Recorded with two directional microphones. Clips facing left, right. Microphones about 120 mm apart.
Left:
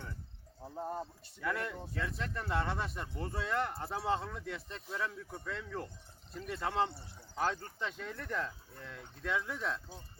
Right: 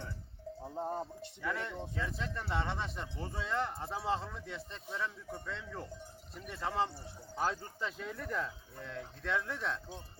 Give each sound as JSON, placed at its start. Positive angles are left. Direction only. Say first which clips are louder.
{"t": 0.6, "sound": "speech", "louder": "right 1 dB", "side_deg": -20}
{"t": 1.4, "sound": "speech", "louder": "left 1 dB", "side_deg": 0}